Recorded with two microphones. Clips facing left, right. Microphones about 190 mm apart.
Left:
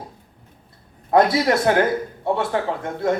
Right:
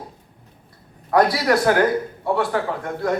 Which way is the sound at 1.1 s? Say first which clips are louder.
Left 1 dB; 25° left (ahead or behind).